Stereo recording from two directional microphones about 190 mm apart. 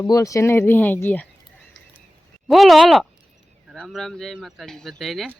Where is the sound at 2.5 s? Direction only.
Centre (ahead or behind).